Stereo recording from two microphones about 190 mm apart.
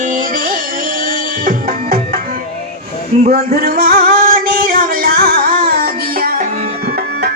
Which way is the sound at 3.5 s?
50° right (ahead or behind).